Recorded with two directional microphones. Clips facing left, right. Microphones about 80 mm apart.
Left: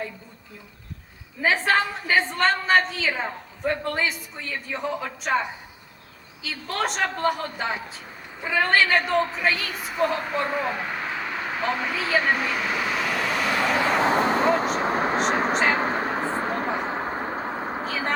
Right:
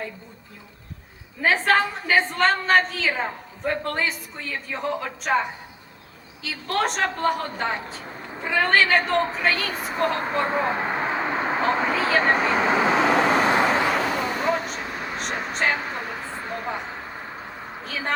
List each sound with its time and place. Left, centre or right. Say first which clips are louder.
1.4 s a woman's voice: right 2 dB; centre
9.7 s a woman's voice: right 4 dB; right
10.4 s a sound: right 3 dB; right
11.7 s a woman's voice: right 3 dB; right
12.2 s vehicle: right 4 dB; right
14.0 s vehicle: left 4 dB; left
17.8 s vehicle: right 1 dB; centre